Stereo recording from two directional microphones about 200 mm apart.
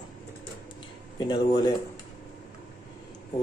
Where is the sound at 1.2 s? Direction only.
20° left (ahead or behind).